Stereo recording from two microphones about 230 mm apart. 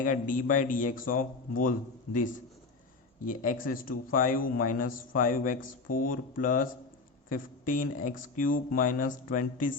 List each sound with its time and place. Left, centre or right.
0.0 s a man's voice: left
3.2 s a man's voice: left